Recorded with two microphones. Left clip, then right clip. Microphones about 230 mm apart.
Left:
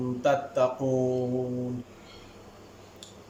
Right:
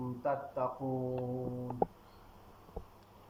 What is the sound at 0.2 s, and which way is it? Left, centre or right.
Speech, left.